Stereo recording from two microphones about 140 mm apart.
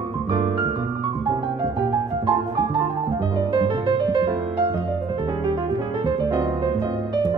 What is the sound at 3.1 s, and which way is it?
Music, 35° right (ahead or behind).